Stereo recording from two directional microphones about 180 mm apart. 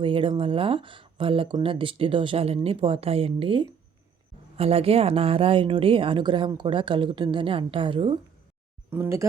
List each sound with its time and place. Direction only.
0.0 s speech: 30° right (ahead or behind)
8.9 s speech: 15° right (ahead or behind)